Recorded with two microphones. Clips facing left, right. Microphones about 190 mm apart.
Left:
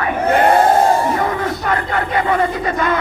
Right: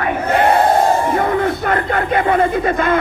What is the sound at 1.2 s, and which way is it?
Speech, 50° right (ahead or behind).